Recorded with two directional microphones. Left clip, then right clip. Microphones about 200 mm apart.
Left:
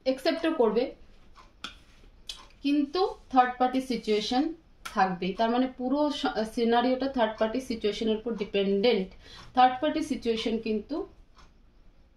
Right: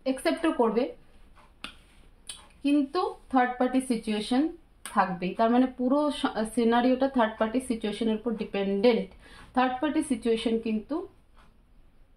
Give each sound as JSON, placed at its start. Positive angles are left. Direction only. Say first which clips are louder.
{"t": 0.0, "sound": "speech", "louder": "even", "side_deg": -25}
{"t": 2.2, "sound": "speech", "louder": "right 1 dB", "side_deg": -25}